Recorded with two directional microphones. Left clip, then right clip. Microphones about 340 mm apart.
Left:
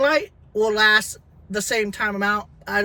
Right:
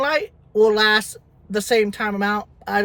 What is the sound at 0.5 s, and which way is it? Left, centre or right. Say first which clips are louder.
A man's voice: right 1 dB; centre.